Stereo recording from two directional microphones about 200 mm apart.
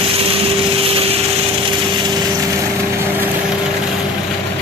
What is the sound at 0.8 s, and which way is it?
Vehicle, 30° right (ahead or behind).